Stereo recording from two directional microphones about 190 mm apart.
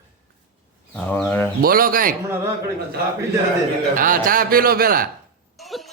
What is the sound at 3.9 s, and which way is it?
A man's voice, 45° right (ahead or behind).